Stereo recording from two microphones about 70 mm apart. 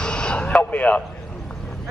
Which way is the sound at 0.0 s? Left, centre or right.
Centre.